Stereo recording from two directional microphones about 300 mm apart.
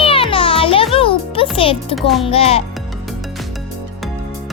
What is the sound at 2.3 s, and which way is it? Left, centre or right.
Speech, centre.